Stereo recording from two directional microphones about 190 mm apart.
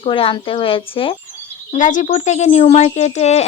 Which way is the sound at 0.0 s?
30° left (ahead or behind).